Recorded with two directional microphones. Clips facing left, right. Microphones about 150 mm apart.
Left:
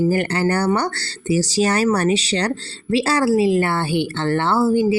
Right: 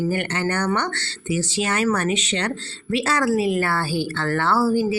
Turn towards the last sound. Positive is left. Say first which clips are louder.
# left 3 dB
turn(degrees=25)  # may be behind; listen again after turning